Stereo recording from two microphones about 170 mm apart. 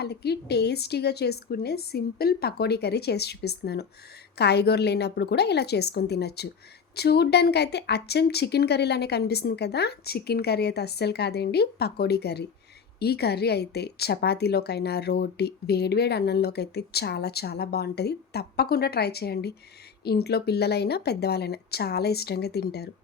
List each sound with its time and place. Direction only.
0.0 s a woman's voice: 70° left (ahead or behind)